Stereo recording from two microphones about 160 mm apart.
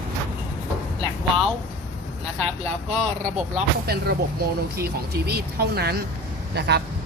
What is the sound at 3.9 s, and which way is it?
Speech, 85° right.